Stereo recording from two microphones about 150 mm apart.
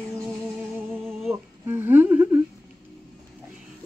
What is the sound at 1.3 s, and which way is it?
A woman's voice, 15° right (ahead or behind).